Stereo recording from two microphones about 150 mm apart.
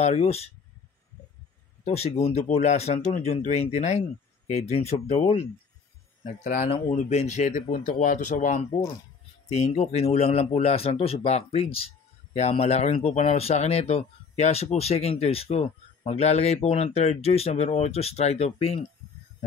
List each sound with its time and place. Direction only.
0.0 s speech: 45° left (ahead or behind)
1.9 s speech: 45° left (ahead or behind)
6.2 s speech: 75° left (ahead or behind)
6.9 s speech: 50° left (ahead or behind)
9.5 s speech: 45° left (ahead or behind)